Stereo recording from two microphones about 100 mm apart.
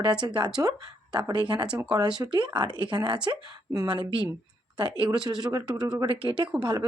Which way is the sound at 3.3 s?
40° right (ahead or behind).